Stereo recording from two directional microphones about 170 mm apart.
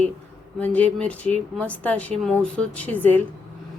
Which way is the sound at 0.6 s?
10° left (ahead or behind).